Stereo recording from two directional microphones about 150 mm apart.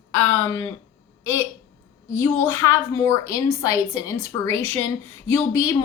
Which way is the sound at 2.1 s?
15° left (ahead or behind).